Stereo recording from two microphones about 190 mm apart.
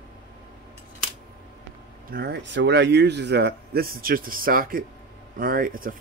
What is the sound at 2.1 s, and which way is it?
Speech, 55° right (ahead or behind).